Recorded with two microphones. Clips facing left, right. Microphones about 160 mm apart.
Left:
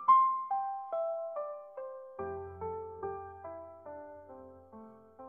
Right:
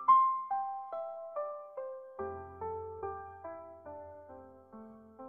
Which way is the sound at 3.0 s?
Centre (ahead or behind).